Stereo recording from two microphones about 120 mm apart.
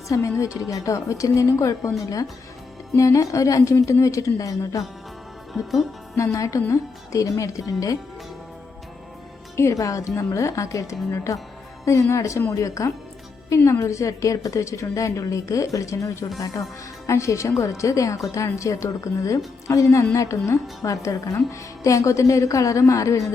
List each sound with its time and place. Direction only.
0.1 s a woman's voice: 25° left (ahead or behind)
6.3 s a woman's voice: 25° left (ahead or behind)
9.6 s a woman's voice: 25° left (ahead or behind)